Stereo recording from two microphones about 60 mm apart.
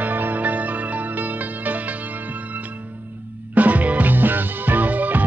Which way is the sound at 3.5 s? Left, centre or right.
Right.